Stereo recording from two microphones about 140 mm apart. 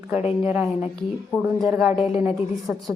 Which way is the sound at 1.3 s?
Centre (ahead or behind).